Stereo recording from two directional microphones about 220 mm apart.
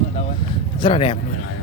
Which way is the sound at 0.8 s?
20° left (ahead or behind).